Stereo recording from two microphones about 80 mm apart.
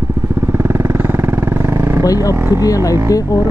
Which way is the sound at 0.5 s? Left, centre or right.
Right.